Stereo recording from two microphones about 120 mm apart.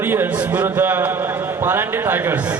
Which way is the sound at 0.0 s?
20° right (ahead or behind).